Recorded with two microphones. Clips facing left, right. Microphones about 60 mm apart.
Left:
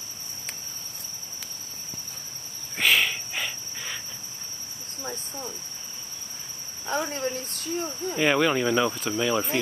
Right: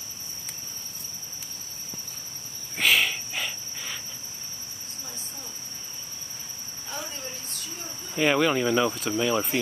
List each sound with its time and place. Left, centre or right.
2.8 s insect: centre
7.1 s cricket: left
8.2 s speech: centre